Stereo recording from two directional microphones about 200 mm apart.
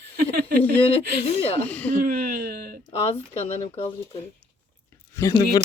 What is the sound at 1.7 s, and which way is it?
Speech, 5° left (ahead or behind).